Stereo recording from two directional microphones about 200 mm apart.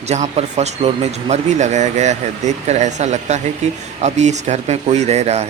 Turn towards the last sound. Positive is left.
turn(degrees=-30)  # may be behind; listen again after turning